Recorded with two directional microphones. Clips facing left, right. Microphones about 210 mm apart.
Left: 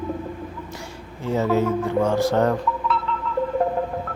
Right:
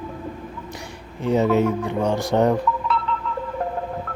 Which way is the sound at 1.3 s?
20° right (ahead or behind).